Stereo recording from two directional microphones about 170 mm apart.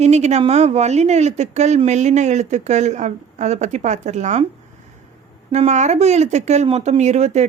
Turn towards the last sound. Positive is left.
turn(degrees=-40)  # may be behind; listen again after turning